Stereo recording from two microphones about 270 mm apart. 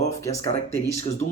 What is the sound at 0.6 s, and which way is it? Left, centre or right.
Speech, left.